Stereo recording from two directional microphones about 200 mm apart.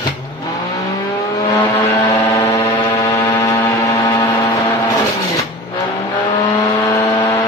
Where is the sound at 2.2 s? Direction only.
20° left (ahead or behind).